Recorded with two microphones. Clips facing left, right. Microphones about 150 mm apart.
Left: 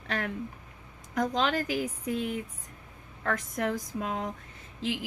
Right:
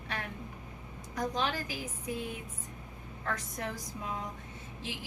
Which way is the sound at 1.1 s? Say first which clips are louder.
Left 5 dB; 65° left (ahead or behind).